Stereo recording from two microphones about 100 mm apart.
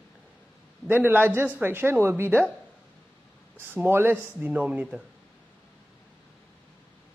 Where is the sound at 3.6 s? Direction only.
20° right (ahead or behind).